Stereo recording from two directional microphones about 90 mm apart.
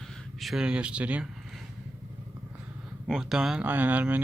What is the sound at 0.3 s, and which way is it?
Speech, centre (ahead or behind).